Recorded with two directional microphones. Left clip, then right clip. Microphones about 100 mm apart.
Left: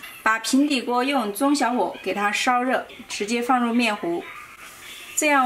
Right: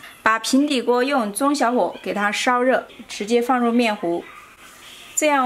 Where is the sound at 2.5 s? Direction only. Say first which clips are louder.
Right 3 dB; 35° right (ahead or behind).